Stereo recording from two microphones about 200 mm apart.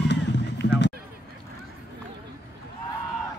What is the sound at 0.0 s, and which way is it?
Music, 60° left (ahead or behind).